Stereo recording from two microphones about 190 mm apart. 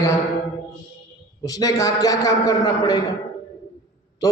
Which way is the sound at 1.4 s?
20° left (ahead or behind).